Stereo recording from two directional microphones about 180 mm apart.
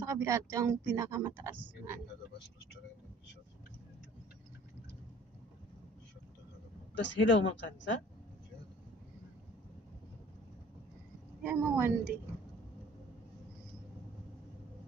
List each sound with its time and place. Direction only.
0.0 s speech: 15° right (ahead or behind)
7.0 s speech: 90° left
11.4 s speech: 10° right (ahead or behind)